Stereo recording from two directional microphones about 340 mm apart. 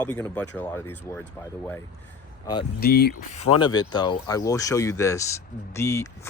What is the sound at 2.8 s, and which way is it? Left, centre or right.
Speech, left.